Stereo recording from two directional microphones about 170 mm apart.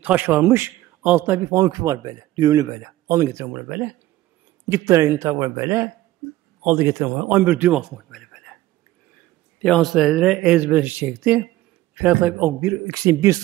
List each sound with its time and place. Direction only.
0.0 s a man's voice: 10° right (ahead or behind)
9.6 s a man's voice: 5° left (ahead or behind); by 13.4 s 20° right (ahead or behind)